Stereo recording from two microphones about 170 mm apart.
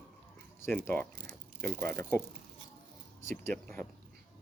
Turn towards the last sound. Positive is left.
turn(degrees=15)  # may be behind; listen again after turning